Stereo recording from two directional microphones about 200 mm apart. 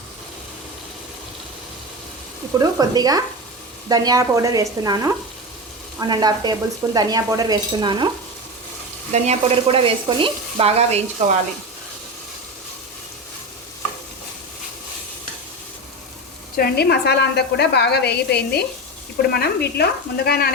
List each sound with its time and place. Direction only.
2.6 s speech: 20° right (ahead or behind)
9.1 s speech: 35° right (ahead or behind)
16.6 s a woman's voice: 55° left (ahead or behind)
19.3 s stir: 50° left (ahead or behind)